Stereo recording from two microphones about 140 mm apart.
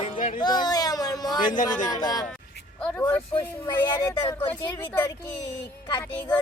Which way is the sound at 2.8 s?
15° left (ahead or behind).